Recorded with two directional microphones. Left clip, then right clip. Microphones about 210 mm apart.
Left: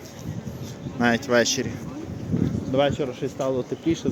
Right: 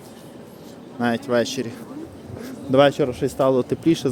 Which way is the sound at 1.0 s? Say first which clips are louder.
Left 1 dB; 5° right (ahead or behind).